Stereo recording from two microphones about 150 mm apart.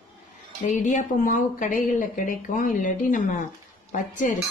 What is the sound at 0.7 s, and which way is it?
Speech, 60° left (ahead or behind).